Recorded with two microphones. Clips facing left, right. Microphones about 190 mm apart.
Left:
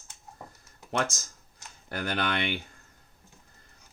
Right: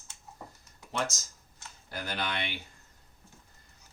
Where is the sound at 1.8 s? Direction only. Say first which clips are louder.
Left 5 dB; 60° left (ahead or behind).